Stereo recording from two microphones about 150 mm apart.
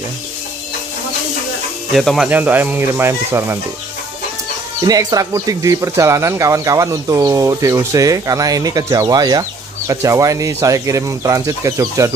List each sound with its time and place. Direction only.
2.0 s speech: centre (ahead or behind)
2.2 s speech: 10° right (ahead or behind)
4.8 s speech: 25° right (ahead or behind)